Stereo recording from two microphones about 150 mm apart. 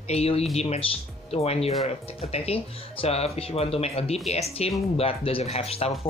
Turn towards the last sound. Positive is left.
turn(degrees=40)  # may be behind; listen again after turning